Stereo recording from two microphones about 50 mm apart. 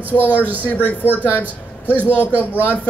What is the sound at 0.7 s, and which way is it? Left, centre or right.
Speech, left.